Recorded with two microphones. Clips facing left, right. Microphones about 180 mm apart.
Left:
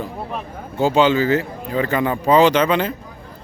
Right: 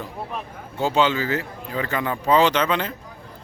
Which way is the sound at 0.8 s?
10° left (ahead or behind).